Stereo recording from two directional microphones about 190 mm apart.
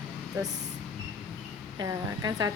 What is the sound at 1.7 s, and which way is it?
Speech, 20° right (ahead or behind).